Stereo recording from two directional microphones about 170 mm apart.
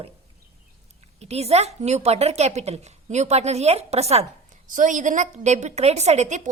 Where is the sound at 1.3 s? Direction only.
40° right (ahead or behind).